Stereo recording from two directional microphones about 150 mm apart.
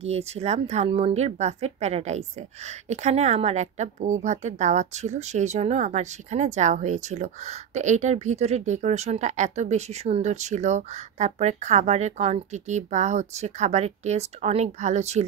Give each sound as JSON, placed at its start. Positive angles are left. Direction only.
{"t": 0.0, "sound": "a woman's voice", "side_deg": -45}